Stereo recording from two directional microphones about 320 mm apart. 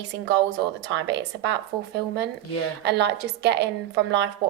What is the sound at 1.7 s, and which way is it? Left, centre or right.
Speech, centre.